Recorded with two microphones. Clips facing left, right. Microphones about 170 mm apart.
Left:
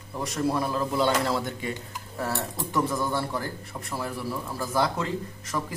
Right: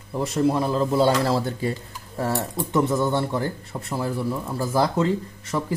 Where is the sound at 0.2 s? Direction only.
25° right (ahead or behind).